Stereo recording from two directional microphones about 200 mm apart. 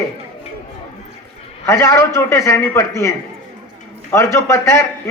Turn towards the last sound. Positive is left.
turn(degrees=15)  # may be behind; listen again after turning